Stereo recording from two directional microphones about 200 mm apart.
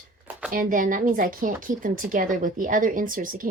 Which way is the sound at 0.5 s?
45° right (ahead or behind).